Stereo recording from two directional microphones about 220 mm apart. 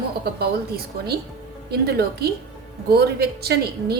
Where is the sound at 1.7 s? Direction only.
45° right (ahead or behind).